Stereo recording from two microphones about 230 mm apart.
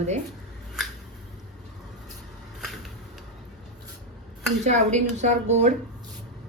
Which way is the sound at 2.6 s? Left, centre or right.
Centre.